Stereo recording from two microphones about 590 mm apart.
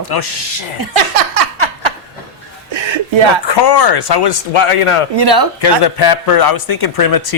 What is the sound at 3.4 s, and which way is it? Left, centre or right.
Speech, left.